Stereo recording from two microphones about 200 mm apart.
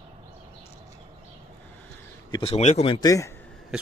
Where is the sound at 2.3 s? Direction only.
25° left (ahead or behind).